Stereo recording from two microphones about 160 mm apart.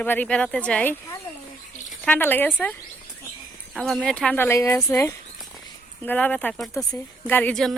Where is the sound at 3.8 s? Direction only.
Centre (ahead or behind).